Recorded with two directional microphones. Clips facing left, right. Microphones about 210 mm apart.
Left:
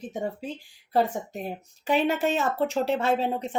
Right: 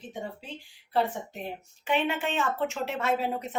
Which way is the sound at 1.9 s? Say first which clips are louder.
Left 4 dB; 35° left (ahead or behind).